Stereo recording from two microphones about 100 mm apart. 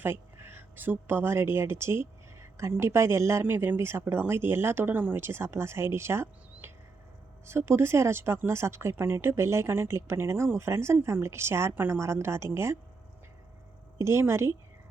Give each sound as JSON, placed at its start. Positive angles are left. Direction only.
{"t": 0.0, "sound": "speech", "side_deg": -25}
{"t": 14.0, "sound": "speech", "side_deg": -30}